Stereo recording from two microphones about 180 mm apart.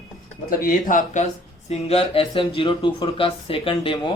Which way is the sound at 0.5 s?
50° left (ahead or behind).